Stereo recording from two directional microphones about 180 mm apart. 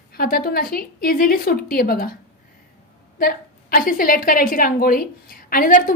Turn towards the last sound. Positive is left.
turn(degrees=50)  # may be behind; listen again after turning